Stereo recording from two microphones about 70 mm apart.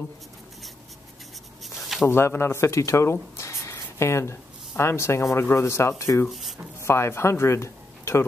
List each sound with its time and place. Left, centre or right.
1.8 s a sound: centre
2.0 s speech: left
6.2 s speech: centre
6.8 s speech: left